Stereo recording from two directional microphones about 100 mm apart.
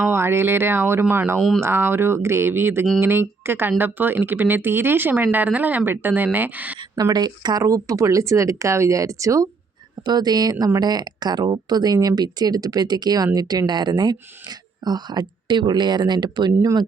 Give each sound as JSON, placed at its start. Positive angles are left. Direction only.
{"t": 0.1, "sound": "speech", "side_deg": -25}
{"t": 1.4, "sound": "speech", "side_deg": 0}
{"t": 1.6, "sound": "speech", "side_deg": -25}
{"t": 6.9, "sound": "speech", "side_deg": -40}